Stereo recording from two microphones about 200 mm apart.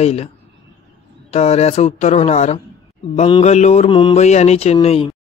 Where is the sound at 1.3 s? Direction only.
30° left (ahead or behind).